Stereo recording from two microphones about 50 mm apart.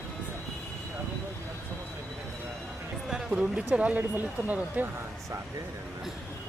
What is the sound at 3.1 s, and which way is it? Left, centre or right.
Speech, centre.